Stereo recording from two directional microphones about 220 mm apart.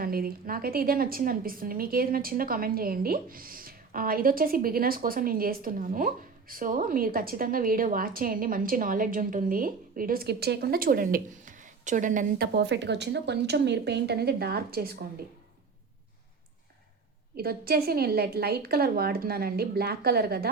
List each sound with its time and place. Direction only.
0.0 s a woman's voice: 40° right (ahead or behind)
12.5 s a woman's voice: 55° right (ahead or behind)
17.3 s a woman's voice: 45° right (ahead or behind)